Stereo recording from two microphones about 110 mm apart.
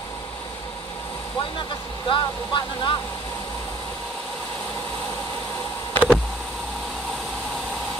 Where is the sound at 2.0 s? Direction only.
45° left (ahead or behind).